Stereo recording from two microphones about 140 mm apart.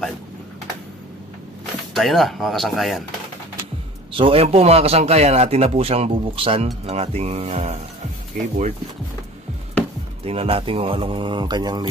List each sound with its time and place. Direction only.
2.0 s speech: centre (ahead or behind)
4.1 s a man's voice: 40° right (ahead or behind)
8.3 s speech: 65° right (ahead or behind)
10.2 s speech: 45° right (ahead or behind)